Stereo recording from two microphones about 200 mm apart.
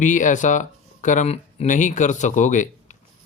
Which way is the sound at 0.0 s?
40° left (ahead or behind).